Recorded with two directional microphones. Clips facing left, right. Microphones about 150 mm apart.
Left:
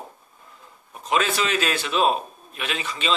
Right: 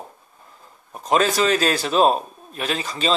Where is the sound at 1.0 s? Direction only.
40° right (ahead or behind).